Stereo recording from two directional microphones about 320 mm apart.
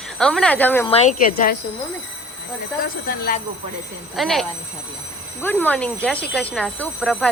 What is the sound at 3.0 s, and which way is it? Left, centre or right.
Speech, left.